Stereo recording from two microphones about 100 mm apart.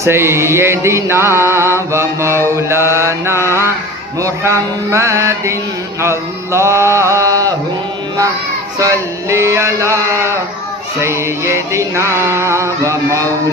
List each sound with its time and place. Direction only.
0.0 s mantra: 25° right (ahead or behind)
8.7 s mantra: 30° right (ahead or behind)